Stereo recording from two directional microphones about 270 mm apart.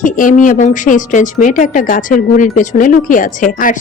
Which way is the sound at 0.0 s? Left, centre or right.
Left.